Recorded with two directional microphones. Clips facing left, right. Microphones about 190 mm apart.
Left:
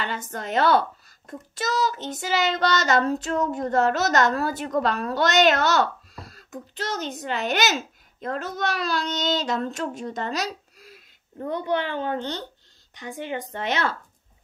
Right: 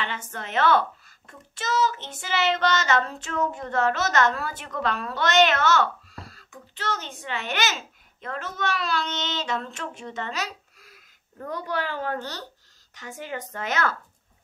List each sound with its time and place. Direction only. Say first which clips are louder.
0.0 s a child's voice: left 3 dB; 40° left (ahead or behind)
11.3 s a woman's voice: left 5 dB; 25° left (ahead or behind)